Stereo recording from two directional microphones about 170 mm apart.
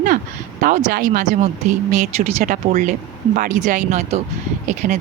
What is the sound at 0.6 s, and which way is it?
Speech, 50° right (ahead or behind).